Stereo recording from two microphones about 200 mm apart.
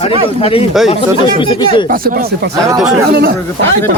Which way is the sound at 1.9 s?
45° right (ahead or behind).